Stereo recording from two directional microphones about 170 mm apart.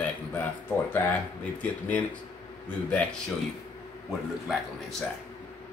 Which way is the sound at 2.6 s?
10° left (ahead or behind).